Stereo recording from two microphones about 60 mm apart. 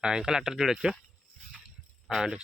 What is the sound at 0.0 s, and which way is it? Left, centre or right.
Speech, centre.